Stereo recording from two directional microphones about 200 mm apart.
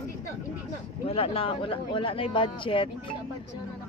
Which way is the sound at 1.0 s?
30° left (ahead or behind).